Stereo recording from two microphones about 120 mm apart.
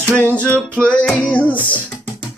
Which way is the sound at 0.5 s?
10° left (ahead or behind).